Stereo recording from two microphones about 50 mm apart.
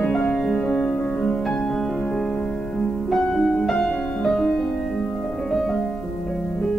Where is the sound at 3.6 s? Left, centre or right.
Centre.